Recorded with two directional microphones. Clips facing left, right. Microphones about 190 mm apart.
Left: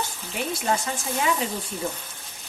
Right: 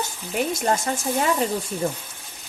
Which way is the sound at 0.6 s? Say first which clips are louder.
Right 3 dB; 45° right (ahead or behind).